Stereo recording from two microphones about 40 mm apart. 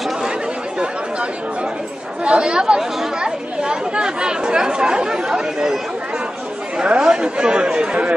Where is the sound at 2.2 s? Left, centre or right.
Right.